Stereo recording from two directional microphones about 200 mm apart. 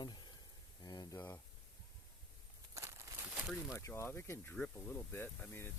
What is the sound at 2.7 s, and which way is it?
Crumpling, 15° right (ahead or behind).